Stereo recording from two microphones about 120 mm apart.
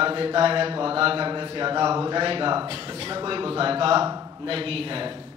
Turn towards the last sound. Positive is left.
turn(degrees=-50)  # may be behind; listen again after turning